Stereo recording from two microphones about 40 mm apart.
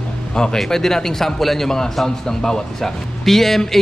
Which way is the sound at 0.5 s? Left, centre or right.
Centre.